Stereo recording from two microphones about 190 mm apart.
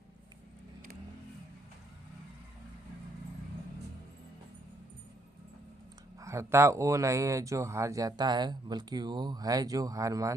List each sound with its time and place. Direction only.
6.1 s speech: 15° right (ahead or behind)